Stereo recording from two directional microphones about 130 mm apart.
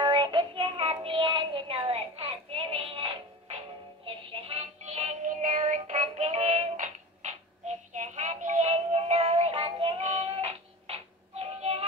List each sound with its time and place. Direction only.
0.0 s child singing: 35° right (ahead or behind)
4.0 s synthetic singing: 45° right (ahead or behind)